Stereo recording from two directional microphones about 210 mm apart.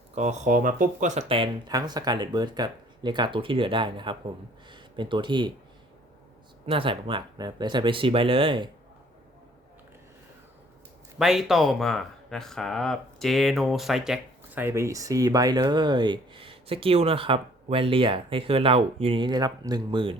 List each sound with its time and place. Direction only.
0.1 s speech: 35° right (ahead or behind)
6.7 s speech: 25° right (ahead or behind)
11.2 s speech: centre (ahead or behind); by 20.1 s 25° right (ahead or behind)